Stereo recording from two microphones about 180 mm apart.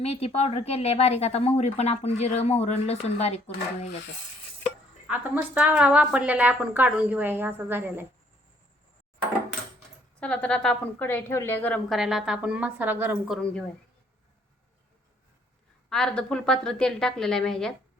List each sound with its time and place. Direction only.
0.0 s a woman's voice: 35° left (ahead or behind)
5.0 s a woman's voice: 5° right (ahead or behind)
10.2 s a woman's voice: 5° left (ahead or behind); by 13.3 s 10° right (ahead or behind)
13.3 s a woman's voice: 5° left (ahead or behind)
15.9 s a woman's voice: 5° left (ahead or behind)